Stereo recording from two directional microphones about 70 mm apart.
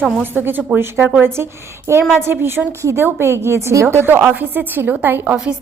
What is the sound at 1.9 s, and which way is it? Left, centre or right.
A woman's voice, right.